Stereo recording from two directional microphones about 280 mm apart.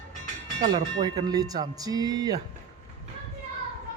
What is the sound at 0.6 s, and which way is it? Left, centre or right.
Speech, centre.